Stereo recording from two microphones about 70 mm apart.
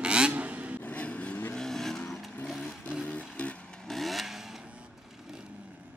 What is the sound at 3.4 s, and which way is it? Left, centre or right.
Vehicle, centre.